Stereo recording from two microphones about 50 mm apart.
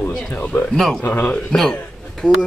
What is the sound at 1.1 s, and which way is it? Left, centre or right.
Speech, left.